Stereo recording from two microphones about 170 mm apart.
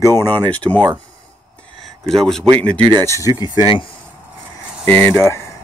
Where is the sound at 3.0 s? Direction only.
20° left (ahead or behind).